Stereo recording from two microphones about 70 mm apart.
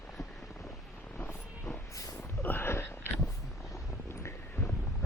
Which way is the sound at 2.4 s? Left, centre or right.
Left.